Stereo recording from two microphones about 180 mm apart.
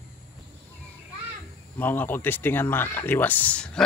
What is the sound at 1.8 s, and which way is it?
Speech, 10° left (ahead or behind).